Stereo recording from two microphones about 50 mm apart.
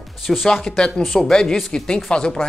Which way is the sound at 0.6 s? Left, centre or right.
Centre.